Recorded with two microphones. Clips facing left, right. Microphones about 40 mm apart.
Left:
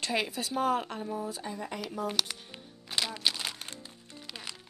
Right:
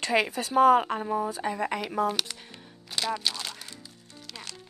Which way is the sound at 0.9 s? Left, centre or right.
Right.